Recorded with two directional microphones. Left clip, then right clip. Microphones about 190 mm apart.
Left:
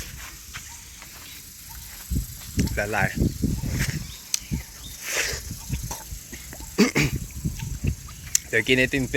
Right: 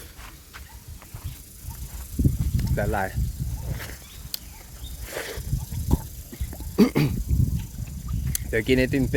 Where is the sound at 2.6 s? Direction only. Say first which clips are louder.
Left 2 dB; 15° right (ahead or behind).